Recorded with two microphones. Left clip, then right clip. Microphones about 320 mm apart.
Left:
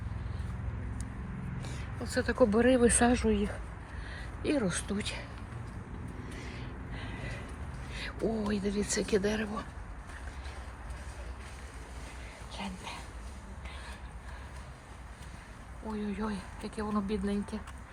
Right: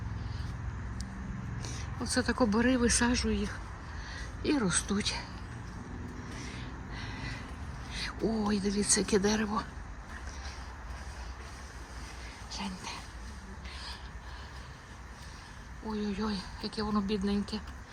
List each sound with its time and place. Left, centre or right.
1.6 s vehicle: centre
2.4 s speech: centre
6.3 s vehicle: centre
8.3 s speech: centre
12.5 s dog: centre
15.9 s speech: centre